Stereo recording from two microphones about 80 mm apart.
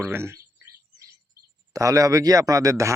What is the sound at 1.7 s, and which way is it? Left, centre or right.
A man's voice, right.